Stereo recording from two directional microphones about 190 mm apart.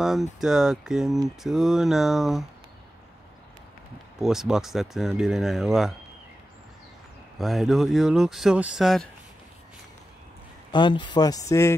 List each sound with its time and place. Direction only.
0.4 s speech: centre (ahead or behind)
4.2 s speech: centre (ahead or behind)
7.3 s speech: centre (ahead or behind)
10.7 s speech: 25° left (ahead or behind)